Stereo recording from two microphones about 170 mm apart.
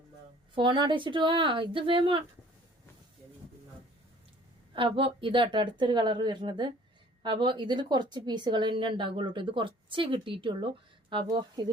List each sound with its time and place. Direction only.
0.5 s a woman's voice: 25° right (ahead or behind)
4.7 s a woman's voice: 30° right (ahead or behind)